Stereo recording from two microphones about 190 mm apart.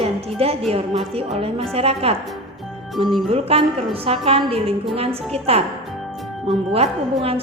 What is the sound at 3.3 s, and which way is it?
Speech, 30° right (ahead or behind).